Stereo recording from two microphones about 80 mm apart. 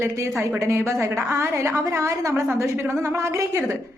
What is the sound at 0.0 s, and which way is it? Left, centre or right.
A woman's voice, right.